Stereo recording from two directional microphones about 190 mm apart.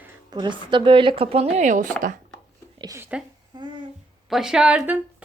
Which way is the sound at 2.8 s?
15° right (ahead or behind).